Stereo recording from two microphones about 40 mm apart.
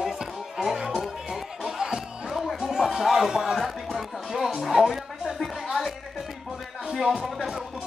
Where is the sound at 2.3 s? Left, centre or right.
Centre.